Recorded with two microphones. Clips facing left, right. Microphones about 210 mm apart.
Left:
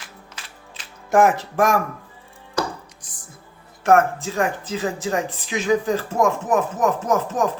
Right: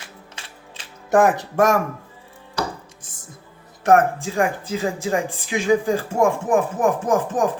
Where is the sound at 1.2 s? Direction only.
20° right (ahead or behind).